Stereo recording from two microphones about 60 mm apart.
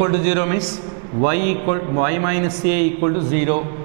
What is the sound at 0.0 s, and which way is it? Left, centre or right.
A man's voice, centre.